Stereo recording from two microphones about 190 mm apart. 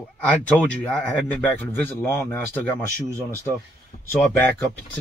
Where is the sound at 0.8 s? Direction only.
10° left (ahead or behind).